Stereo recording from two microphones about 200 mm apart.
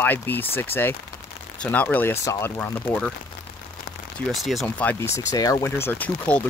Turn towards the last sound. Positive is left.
turn(degrees=5)  # may be behind; listen again after turning